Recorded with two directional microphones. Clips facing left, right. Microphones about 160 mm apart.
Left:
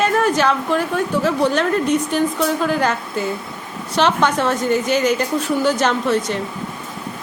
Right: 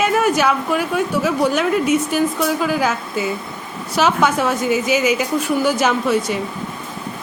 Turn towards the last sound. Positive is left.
turn(degrees=-10)  # may be behind; listen again after turning